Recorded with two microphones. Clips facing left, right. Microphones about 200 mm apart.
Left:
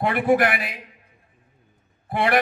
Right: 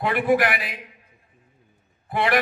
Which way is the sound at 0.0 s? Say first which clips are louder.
Left 1 dB; 50° left (ahead or behind).